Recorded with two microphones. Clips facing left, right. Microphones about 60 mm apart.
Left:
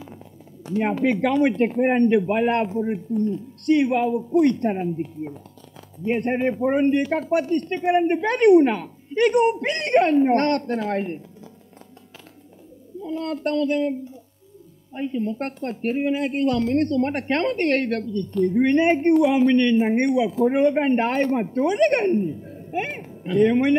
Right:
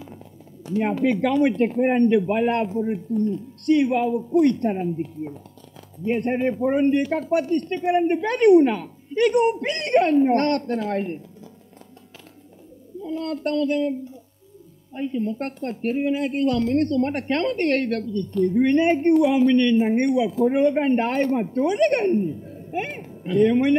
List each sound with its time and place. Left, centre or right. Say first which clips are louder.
0.7 s speech: even; centre
13.0 s speech: even; left
15.0 s speech: even; centre